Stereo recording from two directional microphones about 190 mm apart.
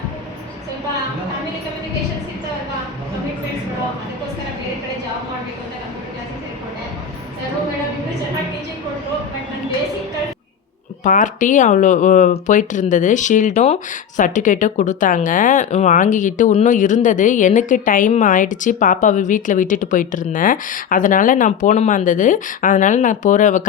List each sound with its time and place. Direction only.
11.0 s speech: 40° left (ahead or behind)